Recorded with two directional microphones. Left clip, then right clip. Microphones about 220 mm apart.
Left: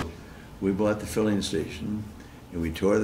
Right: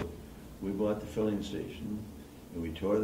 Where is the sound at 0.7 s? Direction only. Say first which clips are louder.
Left 5 dB; 25° left (ahead or behind).